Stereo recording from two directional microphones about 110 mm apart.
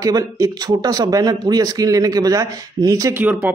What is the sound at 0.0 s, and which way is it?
Speech, 35° right (ahead or behind).